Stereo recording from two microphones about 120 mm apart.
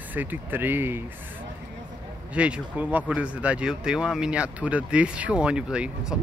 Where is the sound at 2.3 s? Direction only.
10° right (ahead or behind).